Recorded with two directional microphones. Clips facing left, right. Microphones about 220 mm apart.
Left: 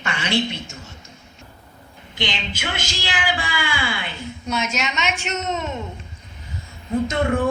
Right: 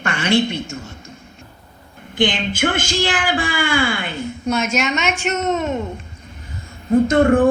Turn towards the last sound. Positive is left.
turn(degrees=-50)  # may be behind; listen again after turning